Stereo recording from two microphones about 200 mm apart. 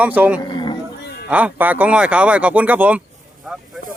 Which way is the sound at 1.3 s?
5° right (ahead or behind).